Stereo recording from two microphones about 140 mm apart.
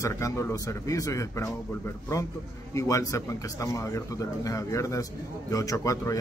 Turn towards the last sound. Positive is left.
turn(degrees=25)  # may be behind; listen again after turning